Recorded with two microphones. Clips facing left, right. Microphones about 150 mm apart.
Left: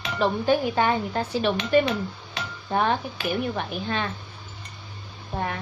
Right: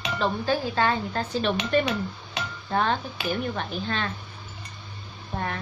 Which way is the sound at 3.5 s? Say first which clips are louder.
Left 2 dB; 10° left (ahead or behind).